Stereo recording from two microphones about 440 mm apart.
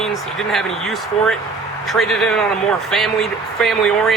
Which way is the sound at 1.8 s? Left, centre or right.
Centre.